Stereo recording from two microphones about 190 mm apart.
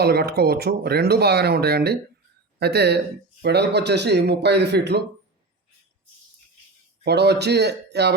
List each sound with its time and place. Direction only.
0.0 s speech: 55° right (ahead or behind)
7.0 s speech: 60° right (ahead or behind)